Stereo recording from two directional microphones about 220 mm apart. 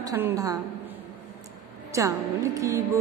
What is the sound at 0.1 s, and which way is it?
Mantra, 10° right (ahead or behind).